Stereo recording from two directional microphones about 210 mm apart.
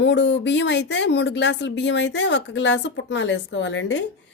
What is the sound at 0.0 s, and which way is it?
Speech, 60° left (ahead or behind).